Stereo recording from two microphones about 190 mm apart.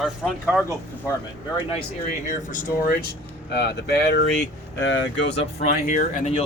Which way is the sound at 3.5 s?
60° left (ahead or behind).